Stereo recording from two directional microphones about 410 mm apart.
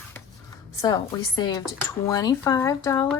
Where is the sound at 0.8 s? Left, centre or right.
Centre.